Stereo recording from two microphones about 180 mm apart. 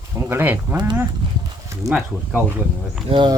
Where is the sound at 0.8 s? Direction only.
25° right (ahead or behind).